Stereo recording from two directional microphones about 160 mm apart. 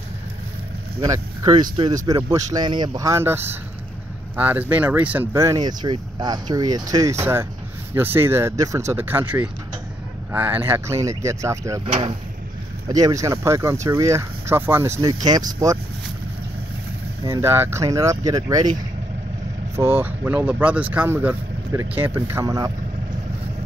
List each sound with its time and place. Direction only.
1.0 s speech: 20° right (ahead or behind)
11.8 s speech: 35° right (ahead or behind)
12.8 s speech: 20° right (ahead or behind)
17.2 s speech: 15° right (ahead or behind)
19.7 s speech: 15° right (ahead or behind)